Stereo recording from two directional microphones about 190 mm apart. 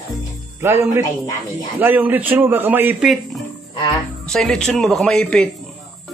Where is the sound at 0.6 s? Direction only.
15° right (ahead or behind).